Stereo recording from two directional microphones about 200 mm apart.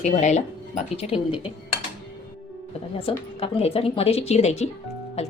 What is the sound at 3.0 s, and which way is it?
Speech, 30° left (ahead or behind).